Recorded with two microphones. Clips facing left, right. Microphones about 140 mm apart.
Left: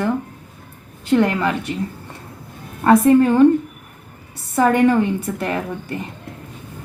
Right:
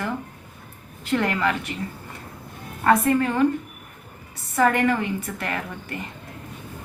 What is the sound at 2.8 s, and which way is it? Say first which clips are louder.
Speech: left 7 dB; 25° left (ahead or behind).